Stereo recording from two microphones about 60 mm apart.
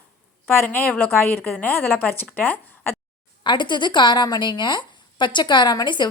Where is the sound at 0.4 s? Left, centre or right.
Left.